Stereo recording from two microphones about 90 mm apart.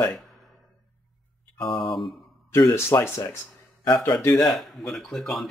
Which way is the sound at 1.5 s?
Centre (ahead or behind).